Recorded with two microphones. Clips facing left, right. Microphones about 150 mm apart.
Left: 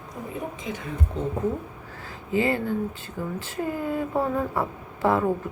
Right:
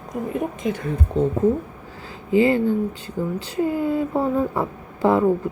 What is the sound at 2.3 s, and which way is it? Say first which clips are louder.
Speech: right 7 dB; 20° right (ahead or behind).